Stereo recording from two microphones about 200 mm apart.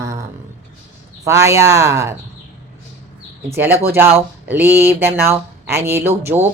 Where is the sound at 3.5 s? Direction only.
10° right (ahead or behind).